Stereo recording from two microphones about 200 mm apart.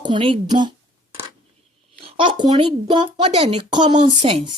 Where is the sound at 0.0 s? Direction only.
25° right (ahead or behind).